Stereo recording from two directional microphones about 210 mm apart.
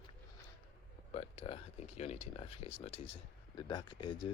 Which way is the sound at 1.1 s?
30° left (ahead or behind).